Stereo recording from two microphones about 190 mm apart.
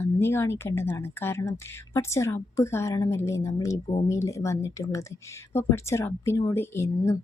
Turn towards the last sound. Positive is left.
turn(degrees=15)  # may be behind; listen again after turning